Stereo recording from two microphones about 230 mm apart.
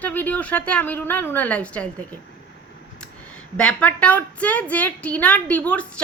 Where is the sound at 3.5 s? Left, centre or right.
Centre.